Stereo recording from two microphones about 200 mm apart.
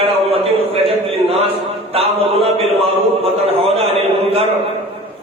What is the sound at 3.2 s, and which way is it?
A man's voice, 30° right (ahead or behind).